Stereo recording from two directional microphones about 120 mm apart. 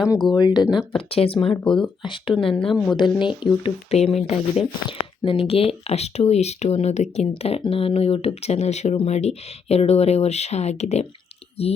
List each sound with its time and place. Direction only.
0.1 s speech: 40° left (ahead or behind)
1.1 s speech: 50° left (ahead or behind)
1.6 s speech: 5° left (ahead or behind)
2.0 s speech: 45° left (ahead or behind)